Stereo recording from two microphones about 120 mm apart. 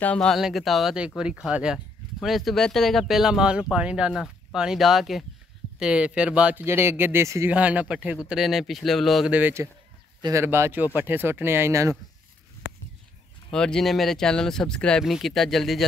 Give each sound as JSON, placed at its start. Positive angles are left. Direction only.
{"t": 0.0, "sound": "speech", "side_deg": 10}
{"t": 6.6, "sound": "speech", "side_deg": -20}
{"t": 7.5, "sound": "speech", "side_deg": -10}
{"t": 9.3, "sound": "speech", "side_deg": -20}
{"t": 13.5, "sound": "speech", "side_deg": 5}